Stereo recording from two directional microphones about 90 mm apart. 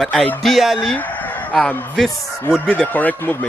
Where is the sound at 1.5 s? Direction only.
15° left (ahead or behind).